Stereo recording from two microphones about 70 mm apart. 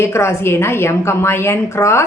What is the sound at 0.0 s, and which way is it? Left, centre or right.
A woman's voice, left.